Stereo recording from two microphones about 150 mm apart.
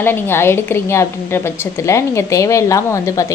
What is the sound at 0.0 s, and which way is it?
A woman's voice, 15° left (ahead or behind).